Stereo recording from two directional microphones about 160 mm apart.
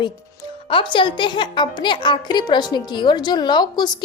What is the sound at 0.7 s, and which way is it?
Speech, 30° left (ahead or behind).